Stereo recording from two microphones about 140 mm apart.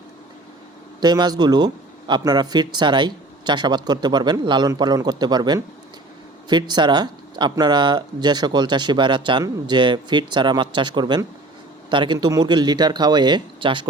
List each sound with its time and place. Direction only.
1.0 s speech: 30° right (ahead or behind)